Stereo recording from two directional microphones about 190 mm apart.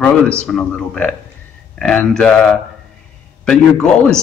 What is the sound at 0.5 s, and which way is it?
A man's voice, 5° left (ahead or behind).